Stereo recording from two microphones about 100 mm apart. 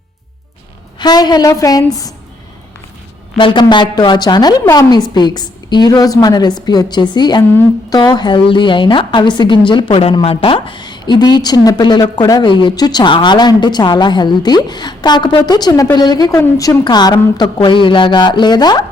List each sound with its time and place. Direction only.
0.9 s a woman's voice: 45° left (ahead or behind)
3.3 s a woman's voice: 55° left (ahead or behind)
10.2 s a woman's voice: 65° left (ahead or behind); by 17.5 s 45° left (ahead or behind)
17.6 s a woman's voice: 55° left (ahead or behind)